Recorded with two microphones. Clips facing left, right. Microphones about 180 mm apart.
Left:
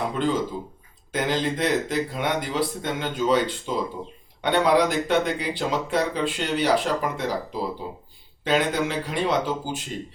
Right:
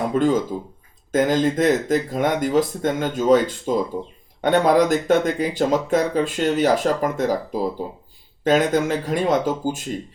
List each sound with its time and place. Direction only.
0.1 s speech: 45° right (ahead or behind)